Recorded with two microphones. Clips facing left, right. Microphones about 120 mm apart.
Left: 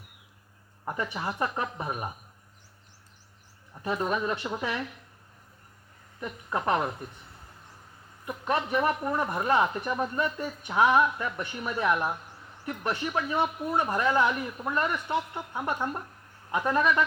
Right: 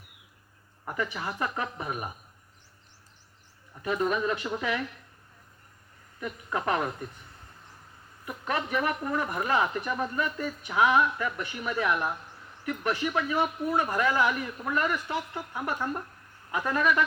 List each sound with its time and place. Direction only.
0.9 s speech: 25° left (ahead or behind)
3.9 s speech: 15° left (ahead or behind)
6.1 s speech: 25° left (ahead or behind)
8.4 s speech: 25° left (ahead or behind)